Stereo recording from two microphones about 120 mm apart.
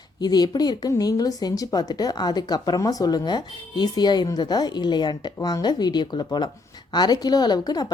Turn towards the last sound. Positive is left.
turn(degrees=35)  # may be behind; listen again after turning